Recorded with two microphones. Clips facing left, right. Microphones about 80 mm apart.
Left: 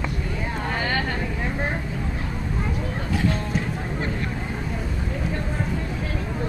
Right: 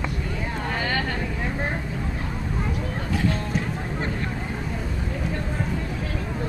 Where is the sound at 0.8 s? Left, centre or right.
Left.